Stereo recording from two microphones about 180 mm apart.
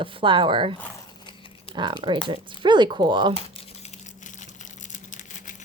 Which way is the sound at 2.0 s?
25° right (ahead or behind).